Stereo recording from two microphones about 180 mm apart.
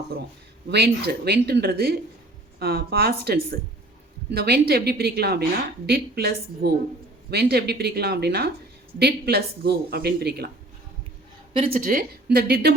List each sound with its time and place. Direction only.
0.7 s a woman's voice: 60° right (ahead or behind)
11.5 s speech: 30° right (ahead or behind)
11.8 s a woman's voice: 50° right (ahead or behind)